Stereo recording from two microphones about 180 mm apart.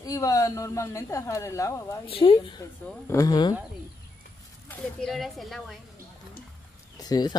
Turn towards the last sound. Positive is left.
turn(degrees=20)  # may be behind; listen again after turning